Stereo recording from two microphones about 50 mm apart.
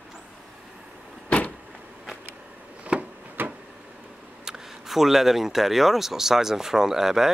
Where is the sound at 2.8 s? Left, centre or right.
Right.